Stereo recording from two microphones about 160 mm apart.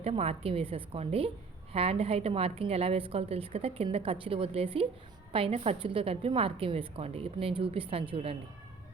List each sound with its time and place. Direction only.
0.0 s a woman's voice: 40° right (ahead or behind)